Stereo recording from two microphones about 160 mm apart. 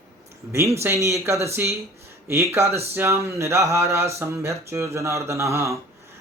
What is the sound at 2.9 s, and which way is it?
Speech, 15° right (ahead or behind).